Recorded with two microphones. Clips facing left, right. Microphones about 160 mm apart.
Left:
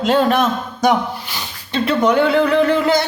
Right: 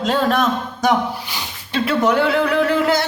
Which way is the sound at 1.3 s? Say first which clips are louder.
Left 1 dB; 5° right (ahead or behind).